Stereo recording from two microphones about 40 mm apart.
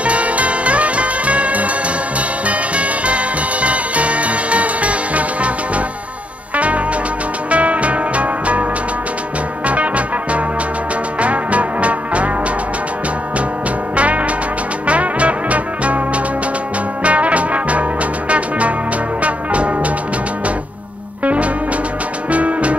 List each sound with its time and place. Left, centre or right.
0.0 s music: right
6.5 s music: right
9.7 s music: right
13.9 s music: right
17.0 s music: right
19.2 s music: right
21.2 s music: right